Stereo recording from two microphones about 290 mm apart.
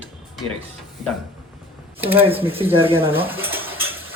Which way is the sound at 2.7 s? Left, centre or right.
Centre.